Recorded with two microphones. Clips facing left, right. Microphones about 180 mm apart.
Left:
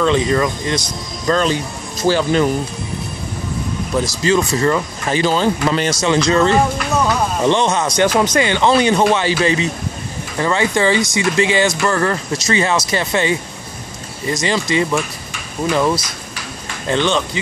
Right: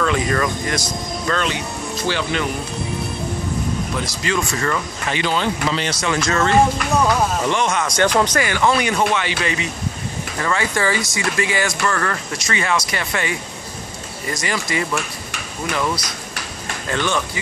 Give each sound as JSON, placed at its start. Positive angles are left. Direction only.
{"t": 0.0, "sound": "speech", "side_deg": 25}
{"t": 1.2, "sound": "speech", "side_deg": 35}
{"t": 4.0, "sound": "speech", "side_deg": 35}
{"t": 6.2, "sound": "speech", "side_deg": 25}
{"t": 8.1, "sound": "speech", "side_deg": 10}
{"t": 8.4, "sound": "speech", "side_deg": 25}